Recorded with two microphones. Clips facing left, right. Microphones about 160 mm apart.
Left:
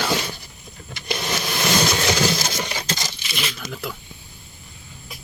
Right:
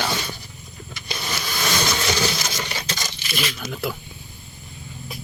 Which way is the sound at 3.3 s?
Centre (ahead or behind).